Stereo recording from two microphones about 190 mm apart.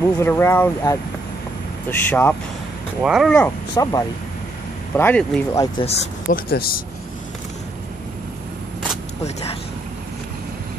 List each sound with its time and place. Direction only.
0.0 s speech: 15° left (ahead or behind)
3.0 s speech: 5° right (ahead or behind)
3.7 s speech: 20° left (ahead or behind)
4.9 s speech: 10° left (ahead or behind)
5.6 s speech: 30° left (ahead or behind)
6.3 s speech: 50° left (ahead or behind)